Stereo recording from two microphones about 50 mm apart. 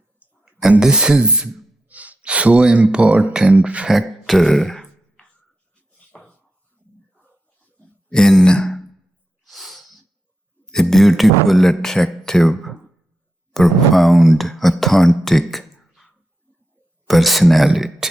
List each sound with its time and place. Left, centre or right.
0.8 s speech: centre
1.9 s speech: right
3.5 s beatboxing: right
3.8 s beatboxing: centre
4.4 s throat clearing: centre
6.1 s a sound: left
8.1 s a man's voice: centre
9.4 s sneeze: centre
10.7 s speech: centre
17.1 s speech: centre